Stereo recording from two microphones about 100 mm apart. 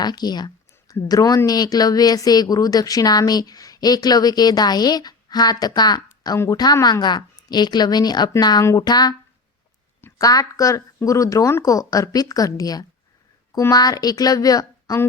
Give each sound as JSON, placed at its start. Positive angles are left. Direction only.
{"t": 0.0, "sound": "a sound", "side_deg": 45}
{"t": 1.0, "sound": "a woman's voice", "side_deg": 40}
{"t": 10.2, "sound": "speech", "side_deg": 35}